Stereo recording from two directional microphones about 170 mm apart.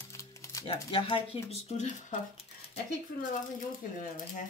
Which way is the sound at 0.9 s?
35° left (ahead or behind).